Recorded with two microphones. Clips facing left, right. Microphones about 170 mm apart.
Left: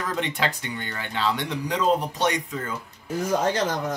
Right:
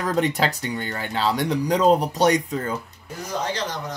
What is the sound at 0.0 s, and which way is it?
Speech, 40° right (ahead or behind).